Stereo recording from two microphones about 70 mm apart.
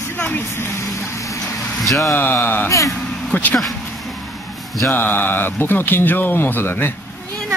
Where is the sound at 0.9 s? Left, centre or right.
Left.